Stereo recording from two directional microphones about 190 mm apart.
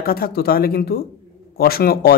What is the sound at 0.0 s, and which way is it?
Speech, 50° left (ahead or behind).